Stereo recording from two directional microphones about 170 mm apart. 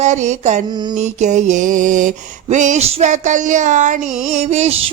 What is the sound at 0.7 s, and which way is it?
Mantra, 25° right (ahead or behind).